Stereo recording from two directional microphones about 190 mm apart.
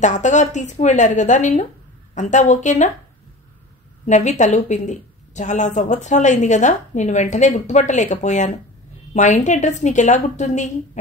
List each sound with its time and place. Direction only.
0.0 s a woman's voice: 40° left (ahead or behind)
4.0 s a woman's voice: 40° left (ahead or behind)